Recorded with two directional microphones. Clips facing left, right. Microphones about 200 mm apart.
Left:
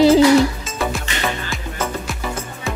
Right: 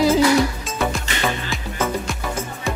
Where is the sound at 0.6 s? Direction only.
Centre (ahead or behind).